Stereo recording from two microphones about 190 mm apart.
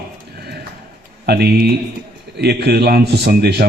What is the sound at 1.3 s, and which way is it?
A man's voice, 55° right (ahead or behind).